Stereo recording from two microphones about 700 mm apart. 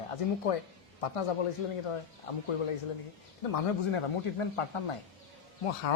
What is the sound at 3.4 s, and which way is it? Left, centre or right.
Speech, left.